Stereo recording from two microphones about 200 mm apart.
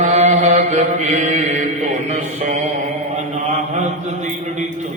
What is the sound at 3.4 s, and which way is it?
Mantra, 35° right (ahead or behind).